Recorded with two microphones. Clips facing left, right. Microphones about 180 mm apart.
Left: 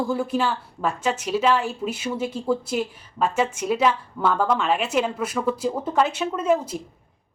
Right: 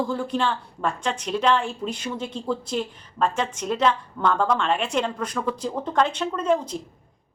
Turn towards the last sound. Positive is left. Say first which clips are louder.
# left 1 dB
turn(degrees=5)  # may be behind; listen again after turning